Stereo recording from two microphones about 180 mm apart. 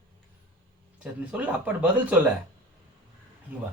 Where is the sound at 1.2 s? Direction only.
5° right (ahead or behind).